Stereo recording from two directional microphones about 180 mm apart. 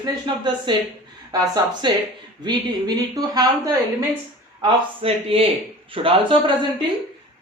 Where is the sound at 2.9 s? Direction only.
20° right (ahead or behind).